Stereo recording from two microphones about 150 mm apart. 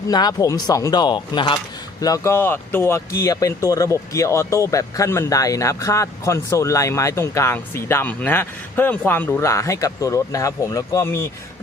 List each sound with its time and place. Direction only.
0.1 s speech: 25° left (ahead or behind)